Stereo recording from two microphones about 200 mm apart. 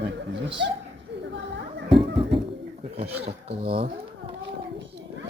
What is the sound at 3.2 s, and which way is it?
Speech, 30° right (ahead or behind).